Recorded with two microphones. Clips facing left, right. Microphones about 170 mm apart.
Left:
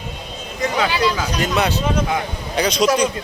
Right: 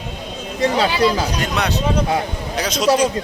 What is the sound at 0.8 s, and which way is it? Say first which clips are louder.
Speech: right 1 dB; 35° right (ahead or behind).